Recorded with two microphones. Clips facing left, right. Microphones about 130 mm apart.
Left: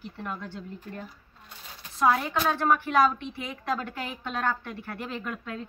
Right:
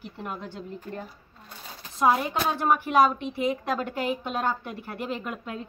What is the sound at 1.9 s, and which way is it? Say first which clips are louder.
A woman's voice: right 1 dB; 15° right (ahead or behind).